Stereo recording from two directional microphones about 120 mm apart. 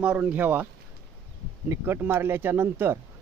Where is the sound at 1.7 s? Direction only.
20° right (ahead or behind).